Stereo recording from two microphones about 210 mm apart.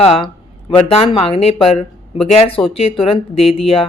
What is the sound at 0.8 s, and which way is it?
A woman's voice, 25° left (ahead or behind).